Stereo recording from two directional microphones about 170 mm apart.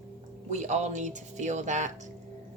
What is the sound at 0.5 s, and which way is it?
Speech, 40° right (ahead or behind).